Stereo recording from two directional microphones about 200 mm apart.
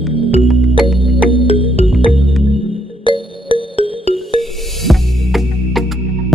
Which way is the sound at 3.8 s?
25° right (ahead or behind).